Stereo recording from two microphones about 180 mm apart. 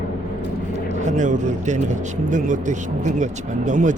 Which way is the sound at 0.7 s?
40° right (ahead or behind).